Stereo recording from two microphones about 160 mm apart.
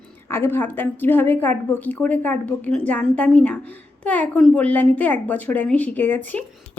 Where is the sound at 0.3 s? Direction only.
15° left (ahead or behind).